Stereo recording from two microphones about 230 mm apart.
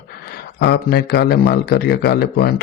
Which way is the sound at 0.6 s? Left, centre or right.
Left.